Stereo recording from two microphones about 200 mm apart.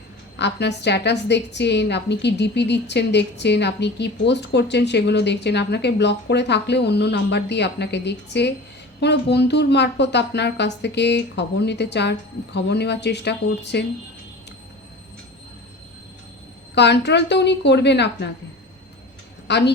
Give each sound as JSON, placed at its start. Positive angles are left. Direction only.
{"t": 0.3, "sound": "a woman's voice", "side_deg": 60}
{"t": 16.7, "sound": "a woman's voice", "side_deg": 60}
{"t": 19.5, "sound": "a woman's voice", "side_deg": 60}